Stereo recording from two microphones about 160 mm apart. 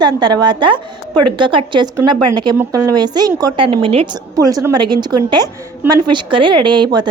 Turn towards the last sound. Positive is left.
turn(degrees=-30)  # may be behind; listen again after turning